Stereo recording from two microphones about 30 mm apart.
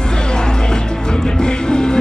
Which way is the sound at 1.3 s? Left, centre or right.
Left.